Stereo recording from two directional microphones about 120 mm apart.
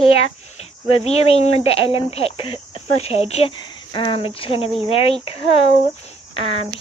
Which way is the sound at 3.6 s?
45° left (ahead or behind).